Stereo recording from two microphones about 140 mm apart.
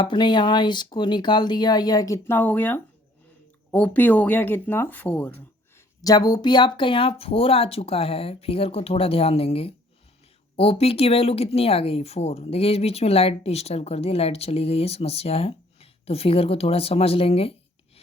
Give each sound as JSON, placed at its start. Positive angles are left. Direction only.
{"t": 0.0, "sound": "speech", "side_deg": 35}
{"t": 6.0, "sound": "speech", "side_deg": 25}